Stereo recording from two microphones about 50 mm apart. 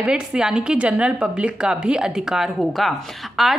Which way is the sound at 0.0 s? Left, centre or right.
Centre.